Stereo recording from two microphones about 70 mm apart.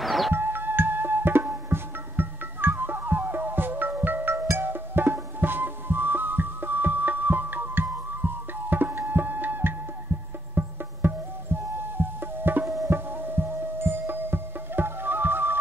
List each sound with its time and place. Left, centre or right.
0.0 s music: centre
0.3 s music: right
12.6 s tabla: right
12.9 s music: right